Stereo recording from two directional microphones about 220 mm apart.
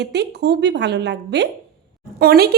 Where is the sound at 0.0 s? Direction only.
50° right (ahead or behind).